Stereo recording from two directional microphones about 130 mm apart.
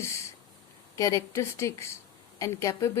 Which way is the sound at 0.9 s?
25° left (ahead or behind).